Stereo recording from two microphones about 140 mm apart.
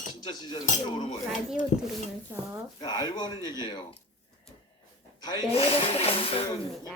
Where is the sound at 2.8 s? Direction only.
30° left (ahead or behind).